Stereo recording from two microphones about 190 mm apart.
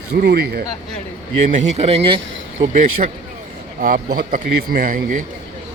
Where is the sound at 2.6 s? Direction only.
45° right (ahead or behind).